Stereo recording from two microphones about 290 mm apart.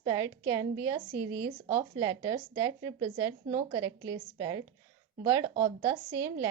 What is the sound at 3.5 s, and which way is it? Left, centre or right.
A woman's voice, right.